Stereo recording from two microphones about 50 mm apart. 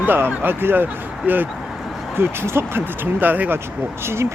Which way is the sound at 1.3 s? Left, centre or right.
Right.